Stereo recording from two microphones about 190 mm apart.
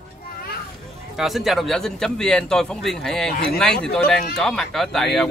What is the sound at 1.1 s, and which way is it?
A man's voice, centre (ahead or behind).